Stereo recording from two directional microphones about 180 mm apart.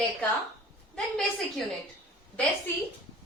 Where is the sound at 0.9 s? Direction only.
Centre (ahead or behind).